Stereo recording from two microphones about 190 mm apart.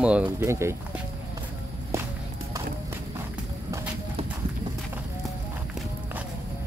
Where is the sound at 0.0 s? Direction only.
5° right (ahead or behind).